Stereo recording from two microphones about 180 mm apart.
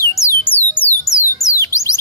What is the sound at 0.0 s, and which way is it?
Music, 15° left (ahead or behind).